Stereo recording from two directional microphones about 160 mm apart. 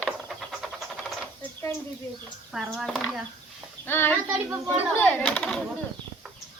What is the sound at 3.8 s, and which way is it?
A child's voice, 15° left (ahead or behind).